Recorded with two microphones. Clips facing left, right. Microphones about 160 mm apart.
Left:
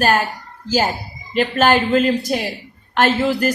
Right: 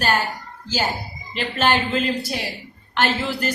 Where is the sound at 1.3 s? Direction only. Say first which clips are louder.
Left 6 dB; 45° left (ahead or behind).